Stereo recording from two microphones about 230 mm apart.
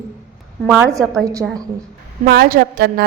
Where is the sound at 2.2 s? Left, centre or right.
Right.